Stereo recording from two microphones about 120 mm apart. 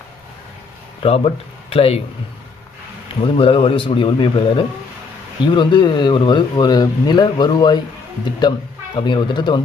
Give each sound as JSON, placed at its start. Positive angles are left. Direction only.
{"t": 1.0, "sound": "speech", "side_deg": 55}
{"t": 3.2, "sound": "a man's voice", "side_deg": 50}